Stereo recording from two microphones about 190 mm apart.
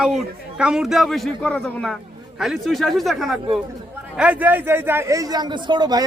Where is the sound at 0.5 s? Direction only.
5° right (ahead or behind).